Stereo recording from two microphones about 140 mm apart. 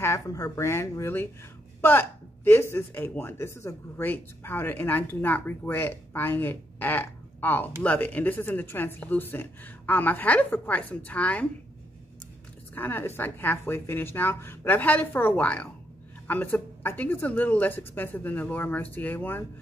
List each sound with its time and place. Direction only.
0.0 s speech: 20° left (ahead or behind)
12.7 s speech: 15° left (ahead or behind)